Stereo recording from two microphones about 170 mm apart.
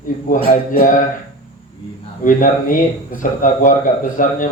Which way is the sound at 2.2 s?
50° left (ahead or behind).